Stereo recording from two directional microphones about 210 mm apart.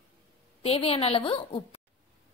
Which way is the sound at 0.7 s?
30° left (ahead or behind).